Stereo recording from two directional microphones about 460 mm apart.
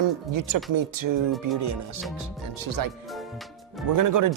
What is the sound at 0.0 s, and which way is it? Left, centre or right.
Speech, right.